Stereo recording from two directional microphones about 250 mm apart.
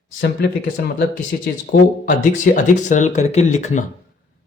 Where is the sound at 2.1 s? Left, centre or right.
Left.